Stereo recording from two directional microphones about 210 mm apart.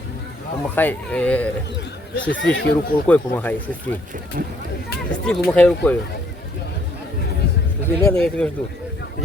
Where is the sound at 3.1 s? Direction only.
10° left (ahead or behind).